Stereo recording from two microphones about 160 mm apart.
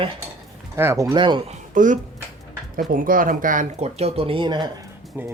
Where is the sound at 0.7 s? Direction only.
20° right (ahead or behind).